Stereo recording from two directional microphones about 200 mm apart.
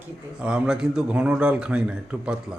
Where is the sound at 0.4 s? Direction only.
5° right (ahead or behind).